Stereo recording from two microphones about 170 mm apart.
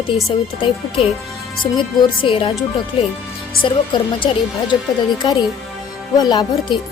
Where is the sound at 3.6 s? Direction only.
30° left (ahead or behind).